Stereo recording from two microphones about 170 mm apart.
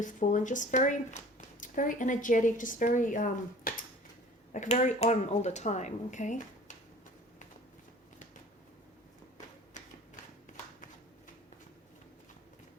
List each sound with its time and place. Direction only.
0.0 s speech: 50° left (ahead or behind)